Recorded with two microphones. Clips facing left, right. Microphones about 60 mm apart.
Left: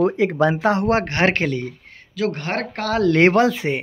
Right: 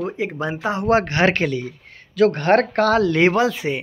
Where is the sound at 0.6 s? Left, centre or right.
Left.